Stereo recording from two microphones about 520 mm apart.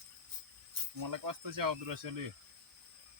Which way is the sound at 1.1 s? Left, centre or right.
Right.